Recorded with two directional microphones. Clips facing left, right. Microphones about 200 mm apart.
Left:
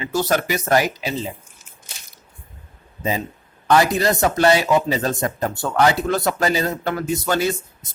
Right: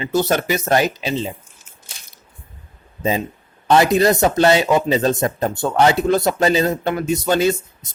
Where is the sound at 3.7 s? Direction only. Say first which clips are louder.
Right 3 dB; 20° right (ahead or behind).